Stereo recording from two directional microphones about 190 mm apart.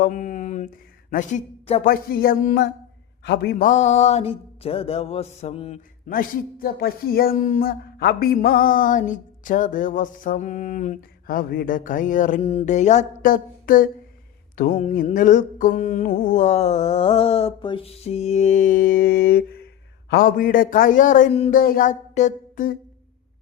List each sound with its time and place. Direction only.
0.0 s mantra: 40° left (ahead or behind)
1.8 s speech: 50° left (ahead or behind)
3.2 s mantra: 55° left (ahead or behind); by 5.8 s 35° left (ahead or behind)
6.1 s speech: 50° left (ahead or behind)
14.5 s mantra: 50° left (ahead or behind)
20.1 s speech: 50° left (ahead or behind)
21.5 s a sound: 50° left (ahead or behind)